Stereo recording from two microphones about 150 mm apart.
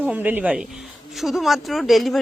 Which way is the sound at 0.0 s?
10° right (ahead or behind).